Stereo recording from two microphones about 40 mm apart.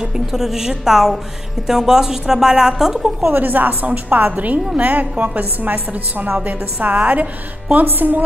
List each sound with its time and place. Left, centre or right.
0.0 s a woman's voice: centre
3.3 s a woman's voice: right
7.8 s a woman's voice: right